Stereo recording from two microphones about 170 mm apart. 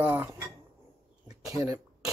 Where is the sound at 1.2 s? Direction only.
20° right (ahead or behind).